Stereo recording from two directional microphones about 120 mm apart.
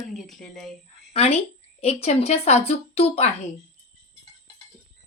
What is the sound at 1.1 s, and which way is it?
A woman's voice, 55° left (ahead or behind).